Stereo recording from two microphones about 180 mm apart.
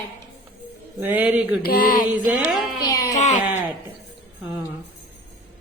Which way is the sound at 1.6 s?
55° left (ahead or behind).